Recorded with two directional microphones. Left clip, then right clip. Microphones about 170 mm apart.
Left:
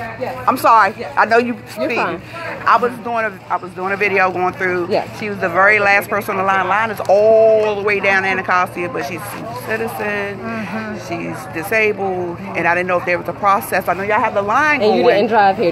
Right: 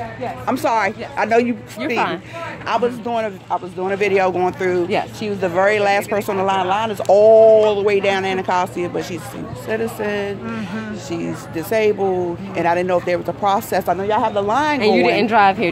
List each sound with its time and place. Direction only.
0.8 s speech: 35° right (ahead or behind)
14.8 s a woman's voice: 40° right (ahead or behind)